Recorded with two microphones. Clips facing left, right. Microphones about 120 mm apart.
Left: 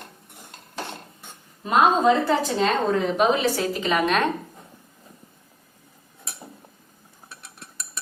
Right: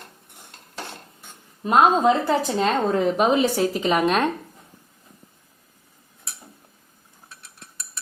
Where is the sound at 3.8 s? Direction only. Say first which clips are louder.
Right 1 dB; 35° right (ahead or behind).